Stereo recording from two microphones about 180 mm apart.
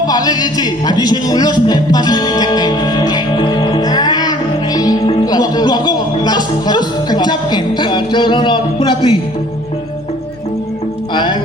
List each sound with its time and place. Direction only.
0.0 s music: 20° left (ahead or behind)
11.1 s music: 25° left (ahead or behind)